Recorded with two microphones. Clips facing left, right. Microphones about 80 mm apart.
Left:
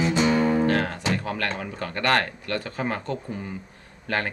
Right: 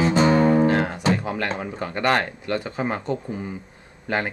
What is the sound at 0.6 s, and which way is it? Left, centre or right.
Music, centre.